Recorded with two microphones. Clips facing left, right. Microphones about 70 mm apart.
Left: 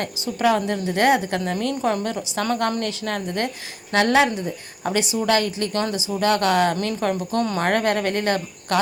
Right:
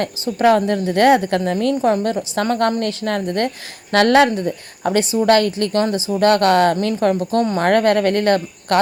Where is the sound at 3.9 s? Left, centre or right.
Right.